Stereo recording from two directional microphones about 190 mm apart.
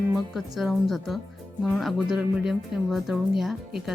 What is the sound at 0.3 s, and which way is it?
Speech, centre (ahead or behind).